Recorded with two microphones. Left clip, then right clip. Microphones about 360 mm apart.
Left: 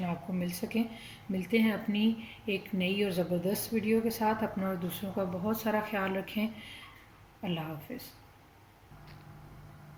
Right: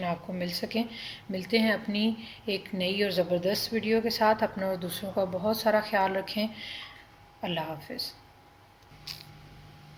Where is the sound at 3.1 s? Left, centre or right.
Right.